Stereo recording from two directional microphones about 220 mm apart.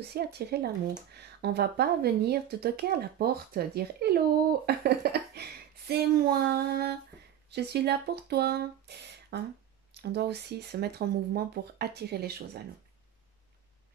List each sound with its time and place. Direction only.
0.1 s speech: 50° right (ahead or behind)